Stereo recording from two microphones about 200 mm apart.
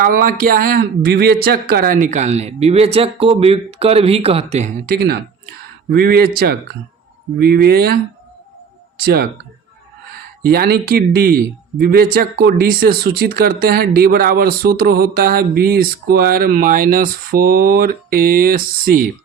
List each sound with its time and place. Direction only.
0.0 s speech: 45° right (ahead or behind)
4.9 s speech: 50° right (ahead or behind)
10.4 s speech: 50° right (ahead or behind)